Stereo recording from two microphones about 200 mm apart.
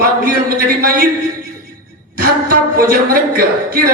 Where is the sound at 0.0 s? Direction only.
45° right (ahead or behind).